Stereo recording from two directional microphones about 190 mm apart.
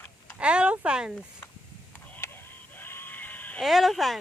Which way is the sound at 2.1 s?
15° left (ahead or behind).